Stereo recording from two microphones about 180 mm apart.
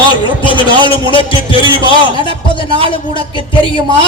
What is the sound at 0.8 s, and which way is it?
A man's voice, 30° left (ahead or behind).